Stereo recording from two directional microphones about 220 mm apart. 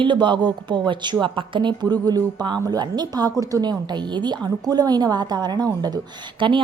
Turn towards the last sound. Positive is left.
turn(degrees=-20)  # may be behind; listen again after turning